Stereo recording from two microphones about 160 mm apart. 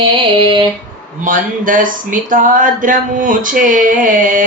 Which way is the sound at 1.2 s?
55° right (ahead or behind).